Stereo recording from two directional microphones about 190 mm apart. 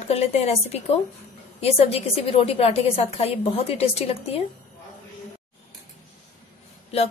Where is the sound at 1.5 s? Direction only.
30° left (ahead or behind).